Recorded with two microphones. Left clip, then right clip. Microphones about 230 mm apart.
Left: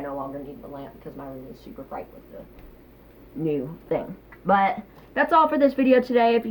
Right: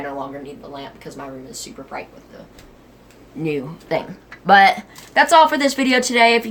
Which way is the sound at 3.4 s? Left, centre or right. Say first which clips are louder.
Right 2 dB; right.